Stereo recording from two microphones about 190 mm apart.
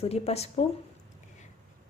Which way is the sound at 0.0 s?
35° left (ahead or behind).